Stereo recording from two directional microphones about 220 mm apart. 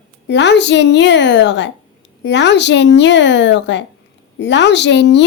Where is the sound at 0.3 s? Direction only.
55° left (ahead or behind).